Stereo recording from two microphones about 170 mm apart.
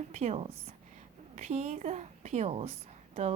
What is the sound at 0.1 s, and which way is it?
A woman's voice, 40° right (ahead or behind).